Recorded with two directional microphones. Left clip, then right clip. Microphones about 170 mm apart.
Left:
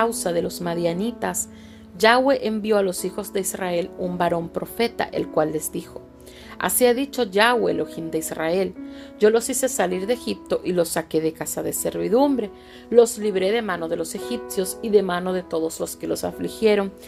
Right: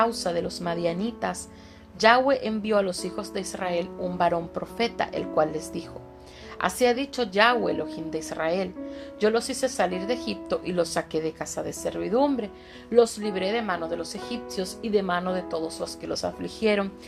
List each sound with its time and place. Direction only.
0.0 s speech: 45° left (ahead or behind)